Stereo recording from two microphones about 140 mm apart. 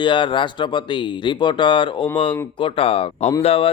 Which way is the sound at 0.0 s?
35° left (ahead or behind).